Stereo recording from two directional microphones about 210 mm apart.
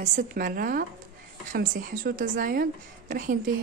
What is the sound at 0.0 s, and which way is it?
A woman's voice, 35° right (ahead or behind).